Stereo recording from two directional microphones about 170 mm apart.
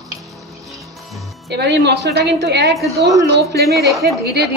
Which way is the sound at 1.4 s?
75° right (ahead or behind).